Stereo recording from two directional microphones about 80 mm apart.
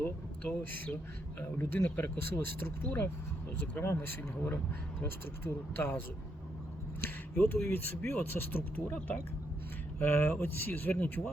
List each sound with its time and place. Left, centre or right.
0.0 s speech: centre
1.4 s speech: left
7.3 s speech: left
10.0 s speech: left